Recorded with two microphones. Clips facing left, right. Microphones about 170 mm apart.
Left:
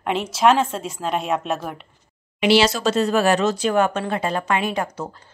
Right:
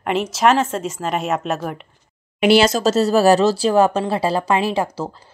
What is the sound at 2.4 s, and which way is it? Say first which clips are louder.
Speech: right 3 dB; 50° right (ahead or behind).